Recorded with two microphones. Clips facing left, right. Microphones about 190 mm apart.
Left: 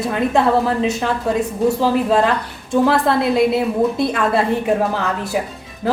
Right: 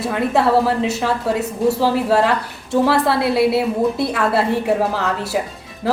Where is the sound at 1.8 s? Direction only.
5° right (ahead or behind).